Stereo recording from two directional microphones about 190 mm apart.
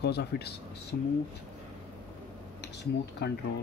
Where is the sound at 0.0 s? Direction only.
60° left (ahead or behind).